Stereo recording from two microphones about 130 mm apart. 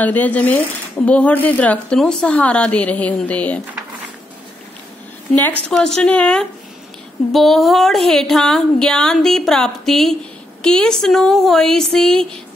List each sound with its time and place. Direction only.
0.0 s speech: 10° left (ahead or behind)
5.7 s speech: 5° left (ahead or behind)